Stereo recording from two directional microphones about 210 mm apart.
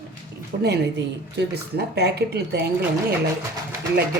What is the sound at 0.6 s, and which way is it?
A woman's voice, 50° right (ahead or behind).